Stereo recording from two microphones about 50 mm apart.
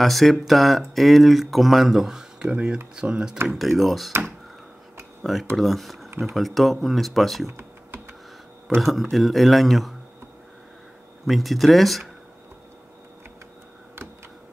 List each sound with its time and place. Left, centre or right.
0.0 s speech: centre
3.4 s speech: centre
5.2 s speech: centre
7.5 s computer keyboard: right
8.7 s speech: centre
11.2 s speech: centre